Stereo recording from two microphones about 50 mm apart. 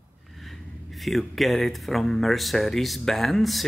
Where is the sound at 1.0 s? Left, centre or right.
Centre.